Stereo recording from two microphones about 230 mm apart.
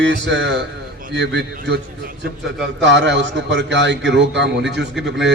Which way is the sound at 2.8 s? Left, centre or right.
Right.